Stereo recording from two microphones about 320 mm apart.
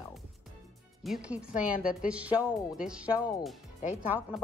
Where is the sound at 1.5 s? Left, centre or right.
Left.